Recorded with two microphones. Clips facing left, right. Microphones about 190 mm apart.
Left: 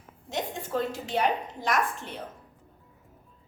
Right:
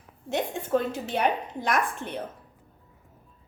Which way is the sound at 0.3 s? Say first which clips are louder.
Right 6 dB; 55° right (ahead or behind).